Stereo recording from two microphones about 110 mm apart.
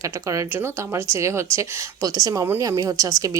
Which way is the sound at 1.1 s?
25° right (ahead or behind).